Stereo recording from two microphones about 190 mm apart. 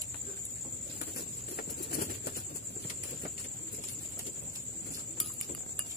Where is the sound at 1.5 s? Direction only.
55° left (ahead or behind).